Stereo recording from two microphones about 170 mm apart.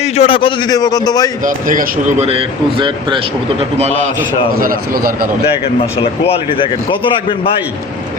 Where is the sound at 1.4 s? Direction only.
50° right (ahead or behind).